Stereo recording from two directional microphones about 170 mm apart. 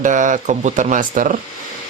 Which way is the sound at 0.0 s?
50° right (ahead or behind).